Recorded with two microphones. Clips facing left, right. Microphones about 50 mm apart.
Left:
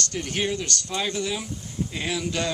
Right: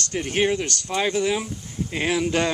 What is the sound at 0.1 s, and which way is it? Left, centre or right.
Speech, right.